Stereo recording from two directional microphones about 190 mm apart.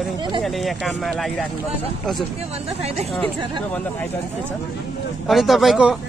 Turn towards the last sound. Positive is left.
turn(degrees=-5)  # may be behind; listen again after turning